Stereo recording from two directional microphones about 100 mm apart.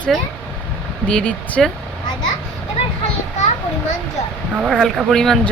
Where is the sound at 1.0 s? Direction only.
10° left (ahead or behind).